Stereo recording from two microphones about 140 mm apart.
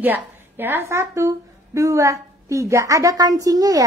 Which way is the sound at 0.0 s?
15° right (ahead or behind).